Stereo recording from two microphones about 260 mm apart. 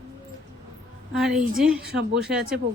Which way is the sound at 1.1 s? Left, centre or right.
Centre.